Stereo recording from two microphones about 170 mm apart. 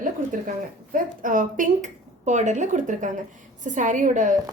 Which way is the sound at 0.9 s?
50° right (ahead or behind).